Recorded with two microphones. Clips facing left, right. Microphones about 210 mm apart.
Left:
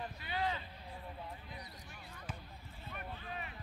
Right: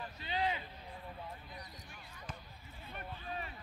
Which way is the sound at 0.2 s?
20° right (ahead or behind).